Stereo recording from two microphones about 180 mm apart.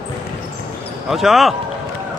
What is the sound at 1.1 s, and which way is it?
Speech, centre (ahead or behind).